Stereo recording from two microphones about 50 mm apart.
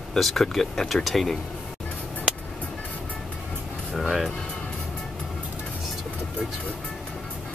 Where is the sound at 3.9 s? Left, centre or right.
Centre.